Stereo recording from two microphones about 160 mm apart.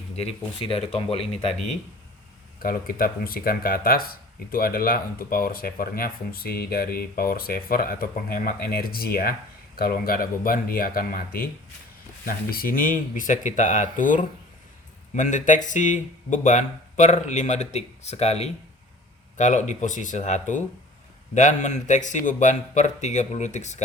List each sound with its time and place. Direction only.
0.2 s speech: 40° left (ahead or behind)
2.6 s speech: 65° left (ahead or behind); by 23.8 s 45° left (ahead or behind)